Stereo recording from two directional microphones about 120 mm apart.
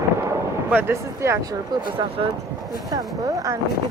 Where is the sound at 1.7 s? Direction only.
35° right (ahead or behind).